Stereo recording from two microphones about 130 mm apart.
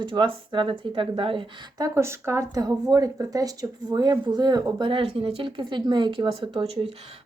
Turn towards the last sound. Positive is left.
turn(degrees=-50)  # may be behind; listen again after turning